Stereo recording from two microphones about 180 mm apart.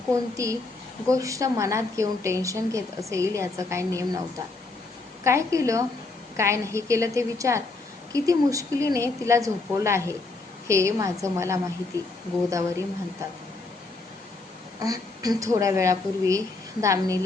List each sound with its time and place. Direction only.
0.1 s speech: 15° right (ahead or behind)
5.2 s speech: 15° right (ahead or behind)
14.8 s speech: 20° right (ahead or behind)